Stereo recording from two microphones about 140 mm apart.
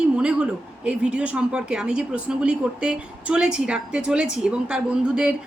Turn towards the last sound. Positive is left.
turn(degrees=-5)  # may be behind; listen again after turning